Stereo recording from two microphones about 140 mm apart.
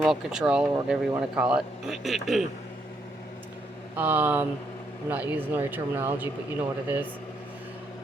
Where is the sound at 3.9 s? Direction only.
15° right (ahead or behind).